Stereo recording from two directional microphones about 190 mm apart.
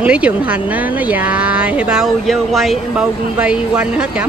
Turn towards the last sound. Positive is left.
turn(degrees=-5)  # may be behind; listen again after turning